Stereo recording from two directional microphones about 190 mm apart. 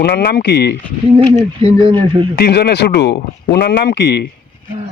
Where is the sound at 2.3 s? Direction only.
60° left (ahead or behind).